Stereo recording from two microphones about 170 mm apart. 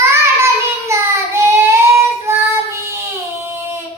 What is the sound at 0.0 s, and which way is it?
Child singing, 15° right (ahead or behind).